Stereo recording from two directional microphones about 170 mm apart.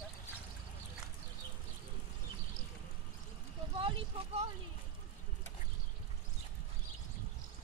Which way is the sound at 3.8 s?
35° right (ahead or behind).